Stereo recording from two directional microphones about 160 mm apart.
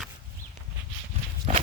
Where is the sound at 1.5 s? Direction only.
45° right (ahead or behind).